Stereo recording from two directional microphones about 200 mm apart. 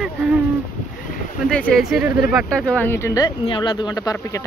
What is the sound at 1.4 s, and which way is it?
Speech, 5° left (ahead or behind).